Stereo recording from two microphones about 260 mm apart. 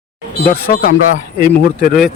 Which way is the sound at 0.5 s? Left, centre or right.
Left.